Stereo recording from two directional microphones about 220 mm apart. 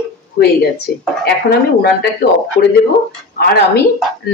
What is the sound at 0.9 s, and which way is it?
Speech, 45° left (ahead or behind).